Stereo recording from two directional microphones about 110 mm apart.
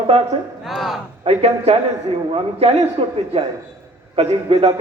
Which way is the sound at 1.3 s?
70° right (ahead or behind).